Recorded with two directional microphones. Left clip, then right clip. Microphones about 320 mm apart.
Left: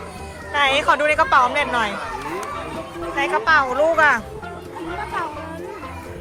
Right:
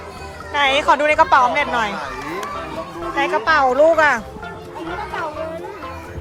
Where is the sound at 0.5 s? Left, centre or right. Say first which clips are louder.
Right 2 dB; centre.